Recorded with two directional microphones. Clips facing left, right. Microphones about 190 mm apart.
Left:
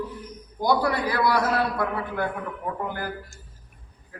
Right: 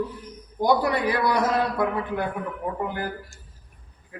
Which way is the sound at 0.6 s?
20° right (ahead or behind).